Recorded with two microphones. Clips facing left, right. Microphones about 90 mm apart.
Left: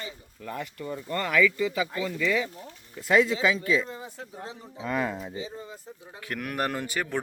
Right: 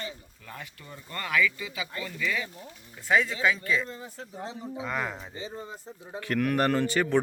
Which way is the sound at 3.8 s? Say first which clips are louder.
Left 1 dB; 15° left (ahead or behind).